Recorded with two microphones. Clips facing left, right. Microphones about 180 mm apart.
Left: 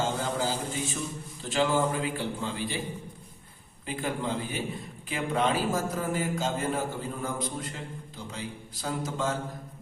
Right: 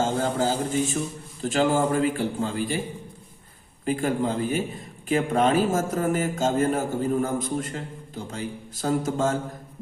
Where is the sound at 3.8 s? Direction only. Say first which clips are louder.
Right 7 dB; 45° right (ahead or behind).